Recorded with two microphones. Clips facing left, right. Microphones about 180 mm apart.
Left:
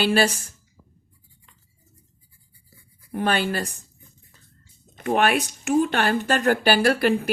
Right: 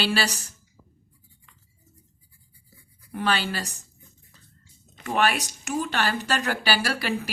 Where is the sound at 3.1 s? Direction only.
50° left (ahead or behind).